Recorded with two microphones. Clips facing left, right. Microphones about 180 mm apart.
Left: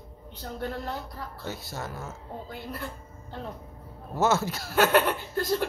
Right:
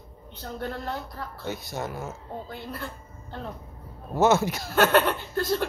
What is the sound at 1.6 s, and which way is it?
Speech, 15° right (ahead or behind).